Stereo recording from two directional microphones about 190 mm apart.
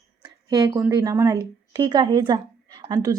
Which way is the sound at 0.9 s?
15° right (ahead or behind).